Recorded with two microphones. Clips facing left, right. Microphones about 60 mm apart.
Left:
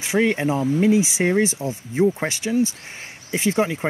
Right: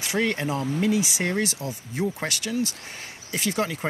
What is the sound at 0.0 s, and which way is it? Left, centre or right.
Speech, centre.